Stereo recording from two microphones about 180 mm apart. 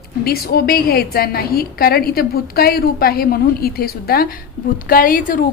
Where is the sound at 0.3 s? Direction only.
55° left (ahead or behind).